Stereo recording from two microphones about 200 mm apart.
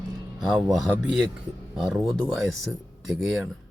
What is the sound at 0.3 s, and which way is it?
Speech, centre (ahead or behind).